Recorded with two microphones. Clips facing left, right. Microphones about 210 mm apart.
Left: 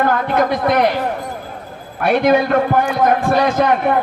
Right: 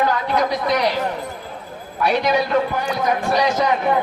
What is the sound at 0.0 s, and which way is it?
Speech, 55° left (ahead or behind).